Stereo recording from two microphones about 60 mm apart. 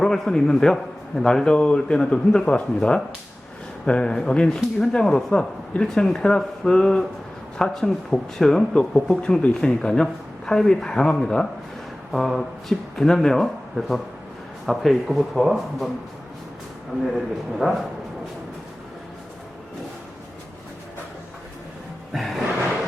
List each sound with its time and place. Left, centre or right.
0.0 s a man's voice: centre
5.8 s speech: centre
12.1 s speech: centre
17.0 s speech: centre
22.1 s a sound: centre